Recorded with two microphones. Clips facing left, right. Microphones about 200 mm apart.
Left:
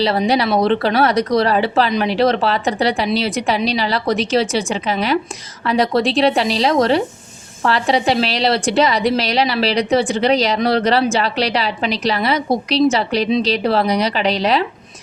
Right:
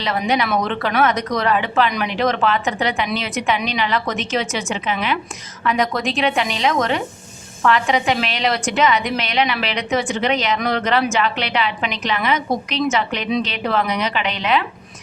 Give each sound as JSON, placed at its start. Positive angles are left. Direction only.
{"t": 0.0, "sound": "a woman's voice", "side_deg": 35}